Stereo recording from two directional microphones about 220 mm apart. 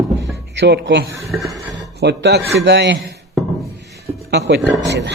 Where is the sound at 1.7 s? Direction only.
50° right (ahead or behind).